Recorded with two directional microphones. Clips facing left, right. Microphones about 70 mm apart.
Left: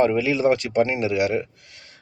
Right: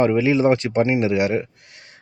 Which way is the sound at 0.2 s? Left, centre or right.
Right.